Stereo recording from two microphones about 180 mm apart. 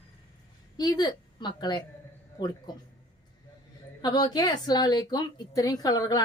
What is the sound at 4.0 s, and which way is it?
Speech, 25° left (ahead or behind).